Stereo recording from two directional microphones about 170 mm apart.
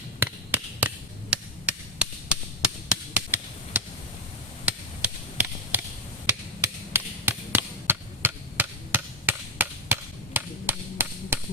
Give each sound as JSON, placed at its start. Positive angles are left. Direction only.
{"t": 0.2, "sound": "chop", "side_deg": -10}